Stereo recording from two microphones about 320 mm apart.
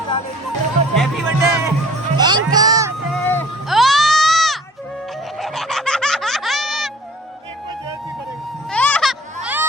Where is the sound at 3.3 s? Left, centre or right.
Centre.